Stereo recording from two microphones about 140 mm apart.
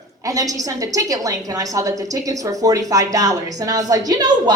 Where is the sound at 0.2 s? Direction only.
25° right (ahead or behind).